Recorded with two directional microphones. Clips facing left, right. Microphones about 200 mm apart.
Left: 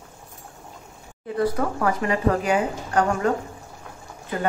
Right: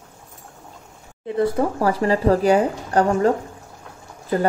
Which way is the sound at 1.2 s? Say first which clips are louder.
Right 3 dB; 25° right (ahead or behind).